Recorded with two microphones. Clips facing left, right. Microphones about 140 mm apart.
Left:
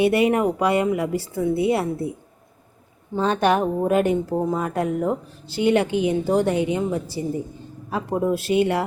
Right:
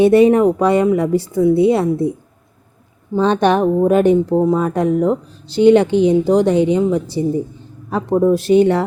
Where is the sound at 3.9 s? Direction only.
20° right (ahead or behind).